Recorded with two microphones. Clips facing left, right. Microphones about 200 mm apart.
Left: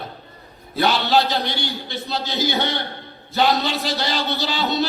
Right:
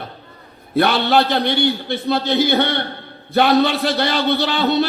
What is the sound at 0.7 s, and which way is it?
A man's voice, 55° right (ahead or behind).